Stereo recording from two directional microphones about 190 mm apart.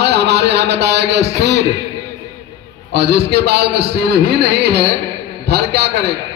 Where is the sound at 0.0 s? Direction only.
60° right (ahead or behind).